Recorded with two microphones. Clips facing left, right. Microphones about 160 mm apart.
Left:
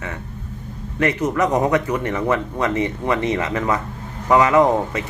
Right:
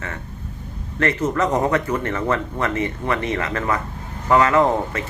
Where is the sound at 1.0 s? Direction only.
15° left (ahead or behind).